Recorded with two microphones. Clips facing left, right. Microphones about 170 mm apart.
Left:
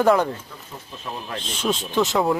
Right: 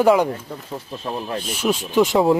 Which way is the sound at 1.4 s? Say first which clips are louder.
Right 1 dB; 10° right (ahead or behind).